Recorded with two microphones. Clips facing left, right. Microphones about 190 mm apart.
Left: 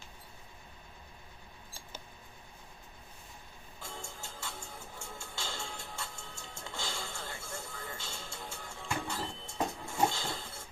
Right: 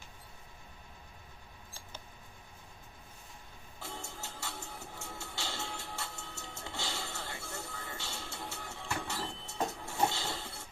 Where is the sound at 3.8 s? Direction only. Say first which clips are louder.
Right 1 dB; 65° right (ahead or behind).